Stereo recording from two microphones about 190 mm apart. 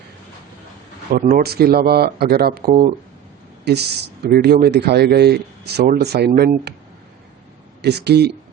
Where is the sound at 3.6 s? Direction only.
60° right (ahead or behind).